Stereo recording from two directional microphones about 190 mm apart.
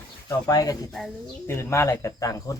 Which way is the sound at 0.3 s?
20° left (ahead or behind).